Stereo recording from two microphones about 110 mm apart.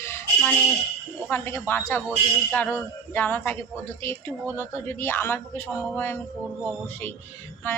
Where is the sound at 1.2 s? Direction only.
20° left (ahead or behind).